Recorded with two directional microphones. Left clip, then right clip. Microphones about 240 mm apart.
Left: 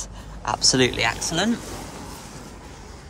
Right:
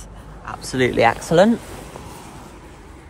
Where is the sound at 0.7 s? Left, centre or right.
Centre.